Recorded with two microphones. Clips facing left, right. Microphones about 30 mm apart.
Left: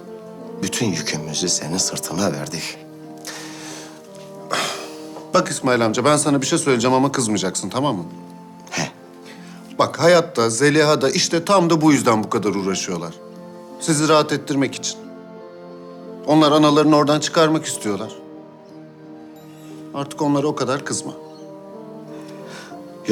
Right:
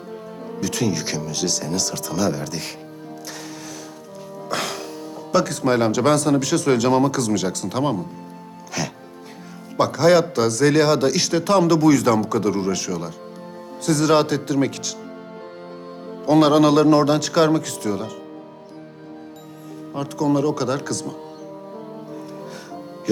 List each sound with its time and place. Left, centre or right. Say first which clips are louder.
0.6 s a man's voice: left 1 dB; centre
3.2 s music: left 3 dB; centre
4.4 s speech: left 3 dB; centre
8.7 s music: left 2 dB; centre
9.7 s a man's voice: left 1 dB; centre
16.2 s a man's voice: left 1 dB; centre
20.1 s a man's voice: left 1 dB; centre